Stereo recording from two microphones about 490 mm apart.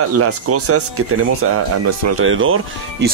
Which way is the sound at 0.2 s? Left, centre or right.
Right.